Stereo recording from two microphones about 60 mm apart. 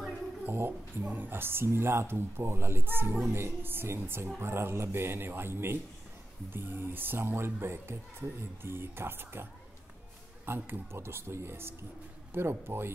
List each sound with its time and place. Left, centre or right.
0.5 s speech: right
1.0 s speech: right